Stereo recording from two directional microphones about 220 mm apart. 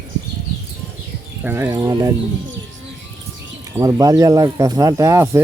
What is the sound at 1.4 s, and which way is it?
Speech, 10° right (ahead or behind).